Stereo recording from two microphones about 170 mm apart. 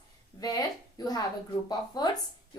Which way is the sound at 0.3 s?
20° left (ahead or behind).